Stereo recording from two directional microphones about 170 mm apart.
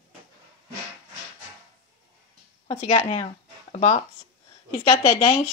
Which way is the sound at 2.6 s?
35° left (ahead or behind).